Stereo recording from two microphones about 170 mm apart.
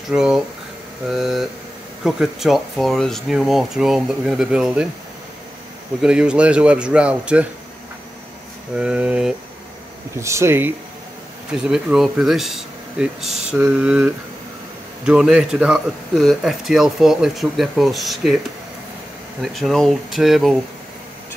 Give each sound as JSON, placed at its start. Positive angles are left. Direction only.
{"t": 0.1, "sound": "a man's voice", "side_deg": -5}
{"t": 6.0, "sound": "speech", "side_deg": -5}
{"t": 8.7, "sound": "speech", "side_deg": -5}
{"t": 11.6, "sound": "a man's voice", "side_deg": -5}
{"t": 19.4, "sound": "a man's voice", "side_deg": 0}